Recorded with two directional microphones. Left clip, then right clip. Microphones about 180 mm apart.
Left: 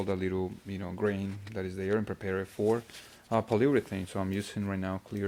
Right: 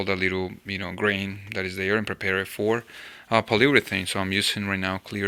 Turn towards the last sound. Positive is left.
turn(degrees=-10)  # may be behind; listen again after turning